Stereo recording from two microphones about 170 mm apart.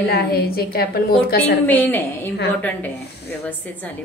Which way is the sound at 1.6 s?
10° left (ahead or behind).